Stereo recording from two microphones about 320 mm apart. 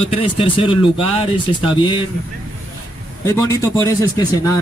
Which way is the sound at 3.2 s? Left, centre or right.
Centre.